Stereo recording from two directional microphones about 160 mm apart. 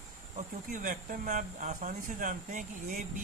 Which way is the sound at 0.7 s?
55° right (ahead or behind).